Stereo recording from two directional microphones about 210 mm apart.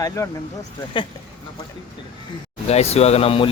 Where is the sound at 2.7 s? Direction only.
30° left (ahead or behind).